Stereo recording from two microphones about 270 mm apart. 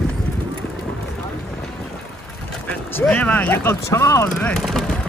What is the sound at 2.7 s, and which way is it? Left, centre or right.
Speech, centre.